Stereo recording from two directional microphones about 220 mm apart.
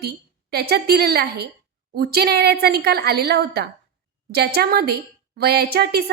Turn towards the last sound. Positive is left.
turn(degrees=-45)  # may be behind; listen again after turning